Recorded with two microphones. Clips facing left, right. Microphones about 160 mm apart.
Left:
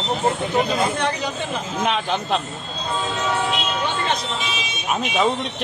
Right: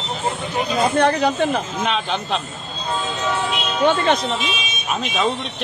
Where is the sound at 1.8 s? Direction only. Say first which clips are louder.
Even; 10° left (ahead or behind).